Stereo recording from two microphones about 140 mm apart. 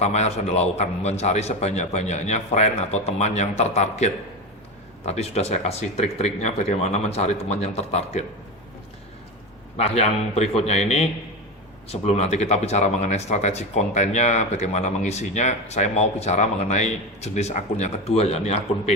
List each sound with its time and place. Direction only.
0.0 s speech: 50° left (ahead or behind)
9.7 s speech: 50° left (ahead or behind)